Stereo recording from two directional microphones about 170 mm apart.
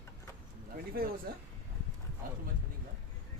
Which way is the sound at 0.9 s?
60° right (ahead or behind).